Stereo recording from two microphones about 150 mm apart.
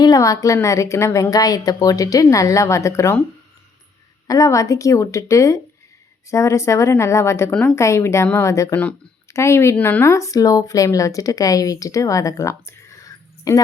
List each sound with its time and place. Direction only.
0.0 s a woman's voice: 25° left (ahead or behind)
4.3 s a woman's voice: 20° left (ahead or behind)
7.5 s a woman's voice: 5° left (ahead or behind)
7.8 s a woman's voice: 20° left (ahead or behind)